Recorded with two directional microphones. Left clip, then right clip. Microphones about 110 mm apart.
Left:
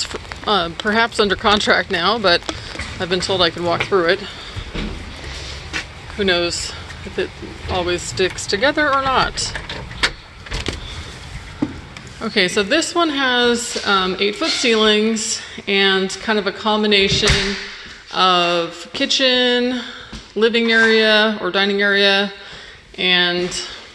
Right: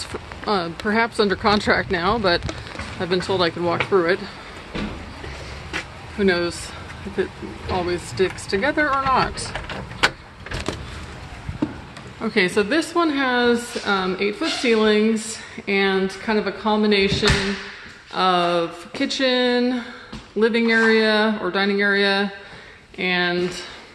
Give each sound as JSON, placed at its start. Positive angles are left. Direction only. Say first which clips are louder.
{"t": 0.0, "sound": "a sound", "louder": "left 5 dB", "side_deg": -20}
{"t": 0.8, "sound": "speech", "louder": "left 2 dB", "side_deg": -20}
{"t": 6.1, "sound": "speech", "louder": "left 3 dB", "side_deg": -20}
{"t": 7.7, "sound": "speech", "louder": "left 4 dB", "side_deg": -15}
{"t": 12.2, "sound": "speech", "louder": "left 2 dB", "side_deg": -35}